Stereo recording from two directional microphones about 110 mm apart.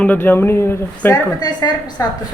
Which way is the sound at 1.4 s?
40° left (ahead or behind).